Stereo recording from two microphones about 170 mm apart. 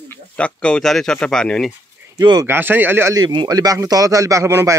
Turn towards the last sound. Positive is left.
turn(degrees=-15)  # may be behind; listen again after turning